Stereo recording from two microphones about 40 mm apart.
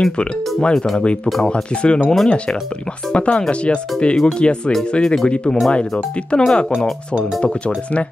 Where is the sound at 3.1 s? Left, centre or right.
Left.